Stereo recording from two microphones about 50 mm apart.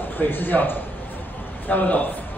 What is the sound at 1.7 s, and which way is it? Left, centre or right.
Speech, left.